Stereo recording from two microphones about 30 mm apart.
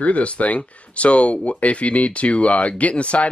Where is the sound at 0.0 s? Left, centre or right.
Left.